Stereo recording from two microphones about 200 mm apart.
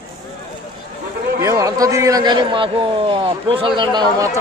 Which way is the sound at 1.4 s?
15° right (ahead or behind).